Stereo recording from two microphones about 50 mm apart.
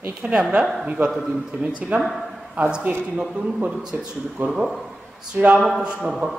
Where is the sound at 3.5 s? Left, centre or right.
Right.